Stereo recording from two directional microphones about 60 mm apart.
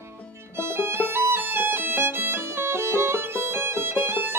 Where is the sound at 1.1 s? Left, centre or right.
Right.